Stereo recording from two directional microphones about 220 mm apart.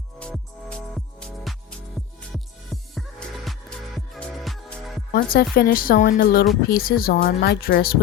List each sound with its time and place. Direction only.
0.2 s music: 5° left (ahead or behind)
5.1 s speech: 45° left (ahead or behind)